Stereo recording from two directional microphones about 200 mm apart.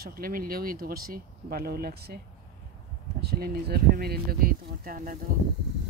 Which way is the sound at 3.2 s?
50° right (ahead or behind).